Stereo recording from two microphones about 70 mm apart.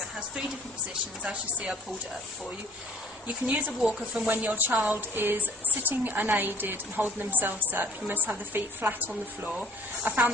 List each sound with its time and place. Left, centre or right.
1.2 s a woman's voice: centre
3.4 s a woman's voice: right